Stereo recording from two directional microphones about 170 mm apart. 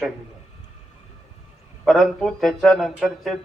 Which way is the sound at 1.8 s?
Centre (ahead or behind).